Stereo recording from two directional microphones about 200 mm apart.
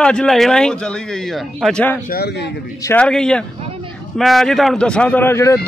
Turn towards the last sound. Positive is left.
turn(degrees=15)  # may be behind; listen again after turning